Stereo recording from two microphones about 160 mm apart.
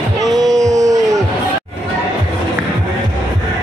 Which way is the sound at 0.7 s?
20° right (ahead or behind).